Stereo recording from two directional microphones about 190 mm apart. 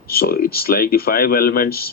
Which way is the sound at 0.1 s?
50° left (ahead or behind).